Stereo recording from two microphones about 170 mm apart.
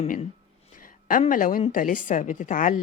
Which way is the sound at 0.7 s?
55° left (ahead or behind).